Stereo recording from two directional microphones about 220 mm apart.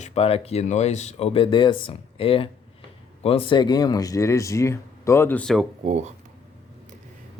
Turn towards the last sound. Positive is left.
turn(degrees=-30)  # may be behind; listen again after turning